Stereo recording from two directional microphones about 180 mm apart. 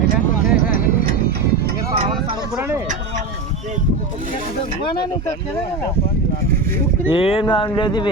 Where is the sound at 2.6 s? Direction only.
10° right (ahead or behind).